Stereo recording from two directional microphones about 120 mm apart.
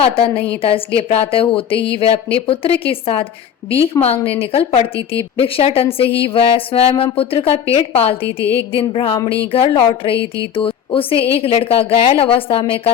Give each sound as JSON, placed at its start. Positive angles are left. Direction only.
{"t": 0.0, "sound": "a woman's voice", "side_deg": 50}